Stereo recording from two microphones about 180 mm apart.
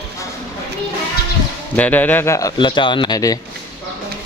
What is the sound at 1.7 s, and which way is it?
A man's voice, 10° left (ahead or behind).